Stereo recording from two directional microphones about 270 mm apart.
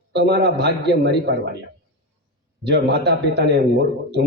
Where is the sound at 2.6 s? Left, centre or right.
Right.